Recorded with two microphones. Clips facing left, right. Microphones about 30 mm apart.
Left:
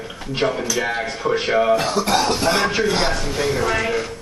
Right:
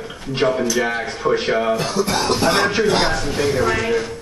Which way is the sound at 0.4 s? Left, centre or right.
Centre.